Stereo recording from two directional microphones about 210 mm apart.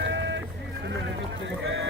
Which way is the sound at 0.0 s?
55° right (ahead or behind).